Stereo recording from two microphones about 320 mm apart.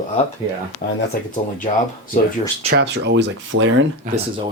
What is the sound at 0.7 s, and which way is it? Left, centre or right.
Speech, centre.